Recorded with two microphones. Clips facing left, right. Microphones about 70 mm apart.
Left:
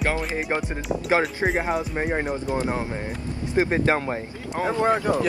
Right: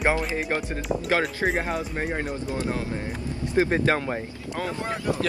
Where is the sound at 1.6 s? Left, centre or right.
Centre.